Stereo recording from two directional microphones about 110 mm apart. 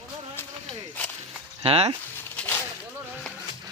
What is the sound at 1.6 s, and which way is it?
Speech, 65° right (ahead or behind).